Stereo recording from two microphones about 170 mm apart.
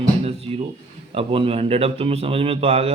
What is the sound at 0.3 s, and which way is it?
Speech, 35° right (ahead or behind).